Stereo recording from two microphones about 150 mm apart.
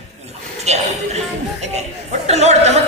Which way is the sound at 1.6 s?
50° right (ahead or behind).